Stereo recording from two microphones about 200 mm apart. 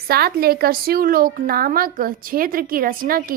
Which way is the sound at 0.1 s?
50° right (ahead or behind).